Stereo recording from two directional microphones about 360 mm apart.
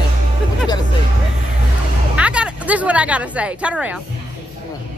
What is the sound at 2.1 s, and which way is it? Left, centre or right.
Speech, centre.